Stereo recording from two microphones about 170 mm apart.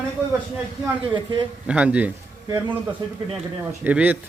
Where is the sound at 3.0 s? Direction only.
25° right (ahead or behind).